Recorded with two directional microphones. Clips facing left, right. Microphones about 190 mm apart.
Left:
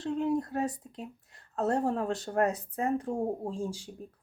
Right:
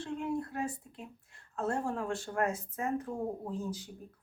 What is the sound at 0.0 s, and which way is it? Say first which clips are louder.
Speech: left 6 dB; 40° left (ahead or behind).